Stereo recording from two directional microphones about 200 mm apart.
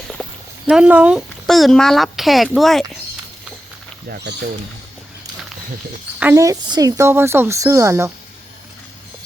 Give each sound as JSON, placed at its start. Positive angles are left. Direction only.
{"t": 0.2, "sound": "clip-clop", "side_deg": 0}
{"t": 0.7, "sound": "speech", "side_deg": -5}
{"t": 4.3, "sound": "speech", "side_deg": -60}
{"t": 6.1, "sound": "speech", "side_deg": -10}